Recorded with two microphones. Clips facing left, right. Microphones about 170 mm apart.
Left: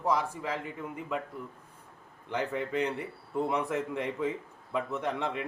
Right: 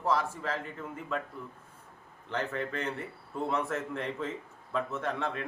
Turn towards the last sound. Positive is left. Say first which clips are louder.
# left 1 dB
turn(degrees=15)  # may be behind; listen again after turning